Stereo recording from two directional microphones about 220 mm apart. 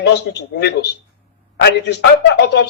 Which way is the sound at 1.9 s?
50° left (ahead or behind).